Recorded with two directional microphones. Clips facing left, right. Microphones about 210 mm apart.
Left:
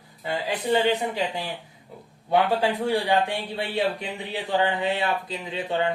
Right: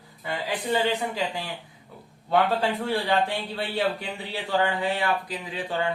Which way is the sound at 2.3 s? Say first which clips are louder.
Left 1 dB; 15° left (ahead or behind).